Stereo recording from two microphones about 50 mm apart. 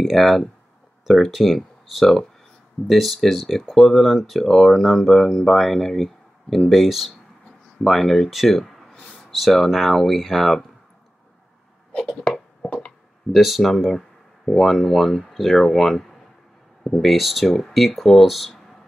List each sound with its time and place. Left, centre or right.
0.0 s speech: centre
12.6 s a sound: left
13.3 s speech: centre